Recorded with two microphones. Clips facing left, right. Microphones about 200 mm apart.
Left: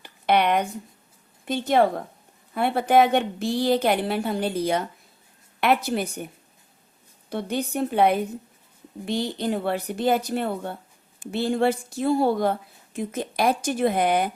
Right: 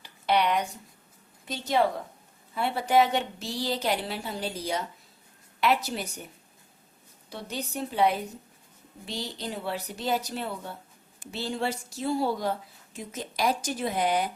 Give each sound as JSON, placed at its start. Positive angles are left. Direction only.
{"t": 0.0, "sound": "a sound", "side_deg": 55}
{"t": 1.5, "sound": "a woman's voice", "side_deg": 55}
{"t": 7.3, "sound": "a woman's voice", "side_deg": 55}